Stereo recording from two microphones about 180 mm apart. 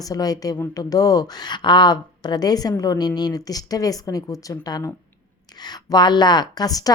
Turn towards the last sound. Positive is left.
turn(degrees=20)  # may be behind; listen again after turning